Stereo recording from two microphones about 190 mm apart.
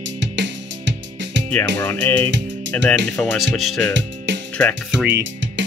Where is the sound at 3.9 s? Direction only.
70° right (ahead or behind).